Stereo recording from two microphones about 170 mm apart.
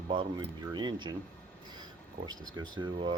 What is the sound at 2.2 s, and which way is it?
Speech, 25° right (ahead or behind).